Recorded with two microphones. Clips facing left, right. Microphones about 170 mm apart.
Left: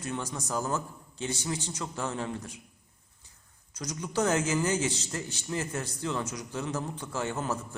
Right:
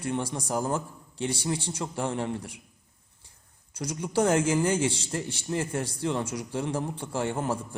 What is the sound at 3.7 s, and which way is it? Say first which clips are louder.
A man's voice: right 4 dB; 30° right (ahead or behind).